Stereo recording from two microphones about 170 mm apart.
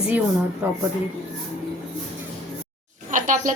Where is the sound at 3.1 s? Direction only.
50° right (ahead or behind).